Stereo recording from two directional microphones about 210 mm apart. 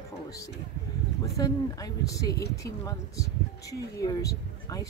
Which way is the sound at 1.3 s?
15° left (ahead or behind).